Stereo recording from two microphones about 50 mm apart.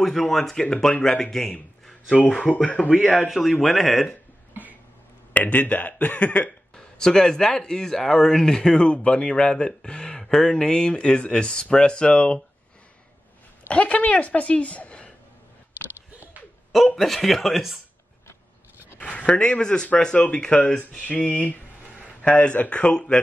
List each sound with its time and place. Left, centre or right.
0.0 s a man's voice: centre
2.5 s speech: left
3.3 s speech: centre
5.3 s speech: left
6.7 s speech: centre
13.7 s a woman's voice: left
16.7 s speech: centre
18.9 s speech: left